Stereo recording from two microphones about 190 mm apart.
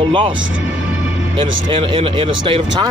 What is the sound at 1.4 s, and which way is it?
Speech, 30° right (ahead or behind).